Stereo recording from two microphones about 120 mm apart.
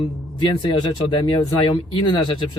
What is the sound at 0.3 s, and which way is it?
Speech, 40° left (ahead or behind).